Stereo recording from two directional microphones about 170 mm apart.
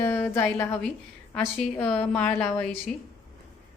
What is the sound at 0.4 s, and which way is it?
Speech, 20° left (ahead or behind).